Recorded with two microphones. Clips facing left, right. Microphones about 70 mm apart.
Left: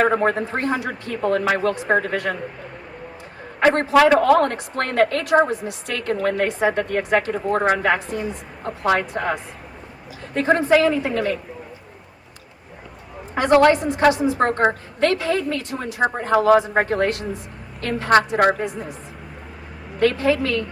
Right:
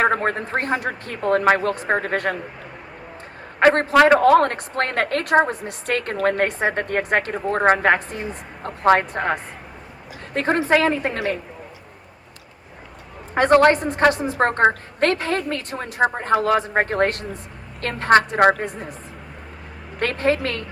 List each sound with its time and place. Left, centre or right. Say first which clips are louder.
0.2 s a woman's voice: left 2 dB; right
3.6 s a woman's voice: right 1 dB; right
4.0 s a woman's voice: right 3 dB; right
13.3 s a woman's voice: even; right
20.0 s a woman's voice: left 3 dB; right